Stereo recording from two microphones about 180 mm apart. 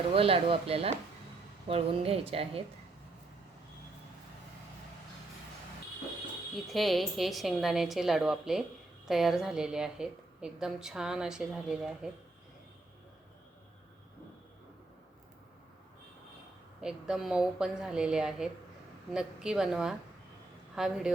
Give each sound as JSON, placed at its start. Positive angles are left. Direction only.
{"t": 0.1, "sound": "a woman's voice", "side_deg": -30}
{"t": 6.7, "sound": "a woman's voice", "side_deg": 0}
{"t": 16.8, "sound": "a woman's voice", "side_deg": -5}